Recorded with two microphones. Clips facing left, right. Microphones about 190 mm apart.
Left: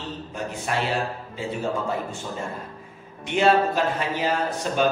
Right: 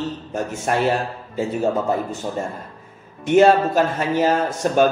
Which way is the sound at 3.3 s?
45° right (ahead or behind).